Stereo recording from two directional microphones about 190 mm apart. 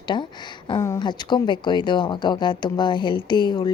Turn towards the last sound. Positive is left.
turn(degrees=25)  # may be behind; listen again after turning